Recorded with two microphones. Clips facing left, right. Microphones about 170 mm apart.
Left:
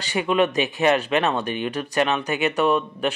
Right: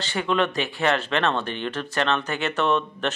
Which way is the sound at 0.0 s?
15° left (ahead or behind).